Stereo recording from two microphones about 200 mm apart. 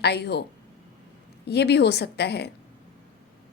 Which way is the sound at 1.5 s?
55° left (ahead or behind).